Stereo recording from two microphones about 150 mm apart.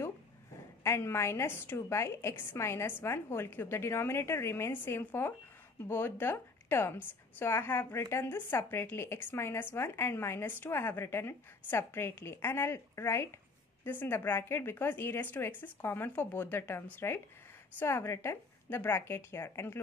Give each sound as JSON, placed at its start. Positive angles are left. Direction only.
{"t": 0.8, "sound": "a woman's voice", "side_deg": 15}